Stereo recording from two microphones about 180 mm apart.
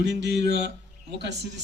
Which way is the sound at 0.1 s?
70° right (ahead or behind).